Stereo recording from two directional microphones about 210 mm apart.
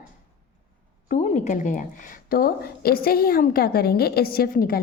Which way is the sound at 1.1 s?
35° left (ahead or behind).